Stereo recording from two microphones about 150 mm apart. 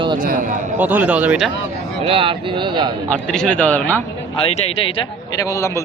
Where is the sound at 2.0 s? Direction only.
40° right (ahead or behind).